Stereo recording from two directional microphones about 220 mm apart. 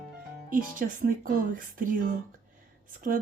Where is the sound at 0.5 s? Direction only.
40° right (ahead or behind).